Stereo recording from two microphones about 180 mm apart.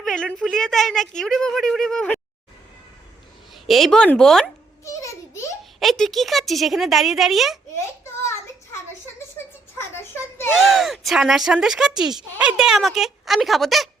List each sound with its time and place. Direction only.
0.0 s speech: centre (ahead or behind)
3.5 s speech: centre (ahead or behind)
4.9 s a sound: 15° left (ahead or behind)
5.8 s speech: centre (ahead or behind)
7.8 s a sound: 15° left (ahead or behind)
10.5 s speech: centre (ahead or behind)